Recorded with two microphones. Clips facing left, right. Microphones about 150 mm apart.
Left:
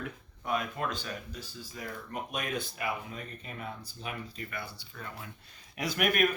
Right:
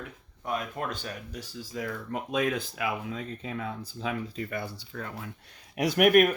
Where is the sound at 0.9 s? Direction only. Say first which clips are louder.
Right 1 dB; 55° right (ahead or behind).